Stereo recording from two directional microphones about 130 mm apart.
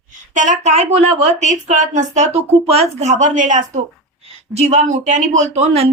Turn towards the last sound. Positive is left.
turn(degrees=-55)  # may be behind; listen again after turning